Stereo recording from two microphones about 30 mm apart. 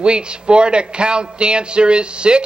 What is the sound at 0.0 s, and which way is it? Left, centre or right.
A man's voice, right.